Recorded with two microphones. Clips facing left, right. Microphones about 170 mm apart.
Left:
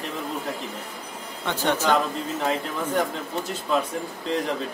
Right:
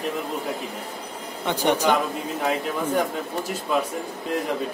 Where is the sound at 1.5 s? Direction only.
15° right (ahead or behind).